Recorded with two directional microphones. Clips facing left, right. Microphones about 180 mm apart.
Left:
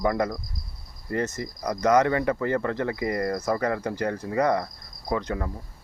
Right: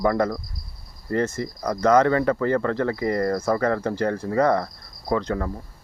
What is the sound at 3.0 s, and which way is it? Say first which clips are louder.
Cricket: right 4 dB; 35° right (ahead or behind).